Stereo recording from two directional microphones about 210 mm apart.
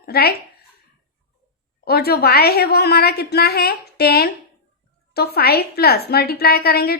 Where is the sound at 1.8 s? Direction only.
50° left (ahead or behind).